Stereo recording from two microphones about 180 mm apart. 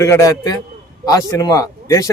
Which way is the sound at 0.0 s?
15° left (ahead or behind).